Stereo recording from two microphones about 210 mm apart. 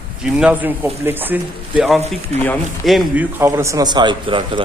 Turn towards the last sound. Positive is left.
turn(degrees=-25)  # may be behind; listen again after turning